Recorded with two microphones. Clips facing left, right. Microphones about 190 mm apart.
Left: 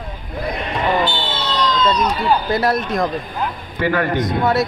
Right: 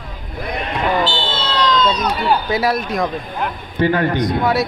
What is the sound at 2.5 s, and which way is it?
Speech, centre (ahead or behind).